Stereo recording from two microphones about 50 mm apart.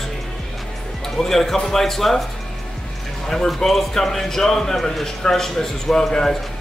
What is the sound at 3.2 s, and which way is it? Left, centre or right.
A man's voice, centre.